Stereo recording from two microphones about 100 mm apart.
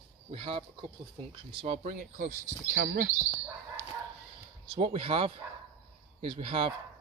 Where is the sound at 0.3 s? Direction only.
70° right (ahead or behind).